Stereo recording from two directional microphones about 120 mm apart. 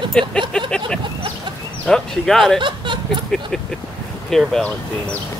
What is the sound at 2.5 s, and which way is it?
Speech, 40° right (ahead or behind).